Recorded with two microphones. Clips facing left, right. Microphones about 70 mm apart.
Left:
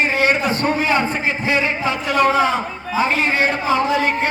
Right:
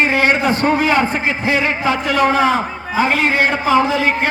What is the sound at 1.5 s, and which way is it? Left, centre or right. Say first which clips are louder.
Speech: right 3 dB; right.